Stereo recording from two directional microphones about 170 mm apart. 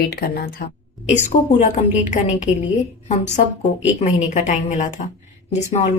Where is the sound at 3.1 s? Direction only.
40° left (ahead or behind).